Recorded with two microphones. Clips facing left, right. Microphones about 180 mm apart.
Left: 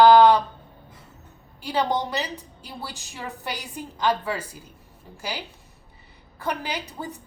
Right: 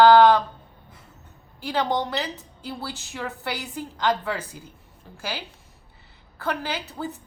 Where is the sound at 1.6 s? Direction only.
15° left (ahead or behind).